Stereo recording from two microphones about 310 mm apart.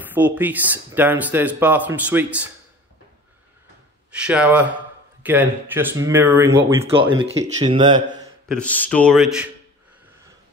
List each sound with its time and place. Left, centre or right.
0.0 s speech: centre
4.1 s speech: centre
8.5 s speech: centre